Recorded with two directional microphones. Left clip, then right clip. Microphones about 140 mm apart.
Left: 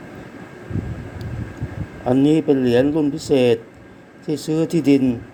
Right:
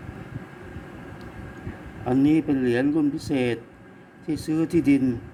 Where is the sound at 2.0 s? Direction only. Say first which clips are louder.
Left 5 dB; 20° left (ahead or behind).